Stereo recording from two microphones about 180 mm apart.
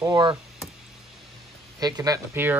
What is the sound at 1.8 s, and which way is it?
Speech, 20° right (ahead or behind).